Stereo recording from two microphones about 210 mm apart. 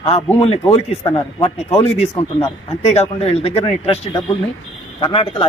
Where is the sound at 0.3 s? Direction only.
30° left (ahead or behind).